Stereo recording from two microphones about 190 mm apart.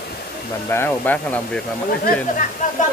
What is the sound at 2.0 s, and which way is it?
Speech, 45° left (ahead or behind).